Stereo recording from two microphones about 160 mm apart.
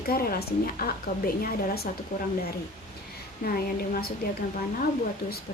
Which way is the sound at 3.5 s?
60° left (ahead or behind).